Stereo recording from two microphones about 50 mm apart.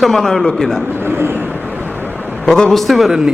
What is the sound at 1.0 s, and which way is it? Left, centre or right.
Vehicle, right.